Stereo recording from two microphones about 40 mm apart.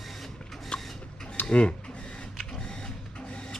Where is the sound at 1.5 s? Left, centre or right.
Left.